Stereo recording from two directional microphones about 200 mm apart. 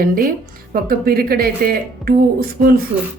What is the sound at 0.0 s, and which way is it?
Speech, 45° right (ahead or behind).